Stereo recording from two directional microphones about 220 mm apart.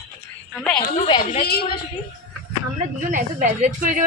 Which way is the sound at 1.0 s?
20° left (ahead or behind).